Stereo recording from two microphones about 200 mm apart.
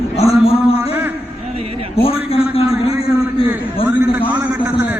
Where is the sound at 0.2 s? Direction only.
30° left (ahead or behind).